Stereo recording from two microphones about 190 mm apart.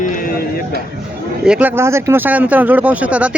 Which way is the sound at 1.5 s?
10° right (ahead or behind).